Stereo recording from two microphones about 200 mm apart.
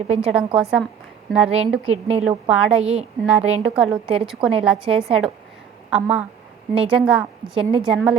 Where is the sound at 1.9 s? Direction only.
30° right (ahead or behind).